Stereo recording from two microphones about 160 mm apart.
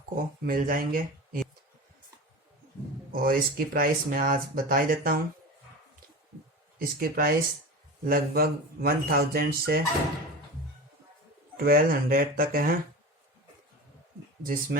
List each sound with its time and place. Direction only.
0.4 s speech: 60° right (ahead or behind)
3.1 s speech: 65° right (ahead or behind)
6.7 s speech: 70° right (ahead or behind)
11.6 s speech: 65° right (ahead or behind)
14.4 s speech: 60° right (ahead or behind)